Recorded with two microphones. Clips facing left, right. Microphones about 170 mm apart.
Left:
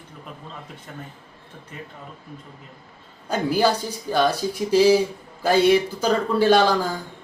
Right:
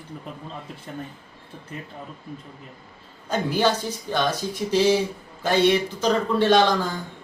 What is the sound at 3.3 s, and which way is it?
Speech, 10° left (ahead or behind).